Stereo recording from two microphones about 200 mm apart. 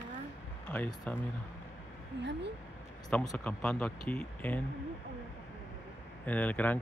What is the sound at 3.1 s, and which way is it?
Speech, 5° left (ahead or behind).